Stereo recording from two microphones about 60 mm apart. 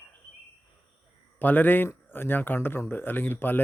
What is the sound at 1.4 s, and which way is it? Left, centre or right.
Speech, left.